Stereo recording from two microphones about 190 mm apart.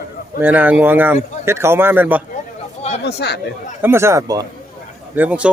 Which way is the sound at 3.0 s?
60° left (ahead or behind).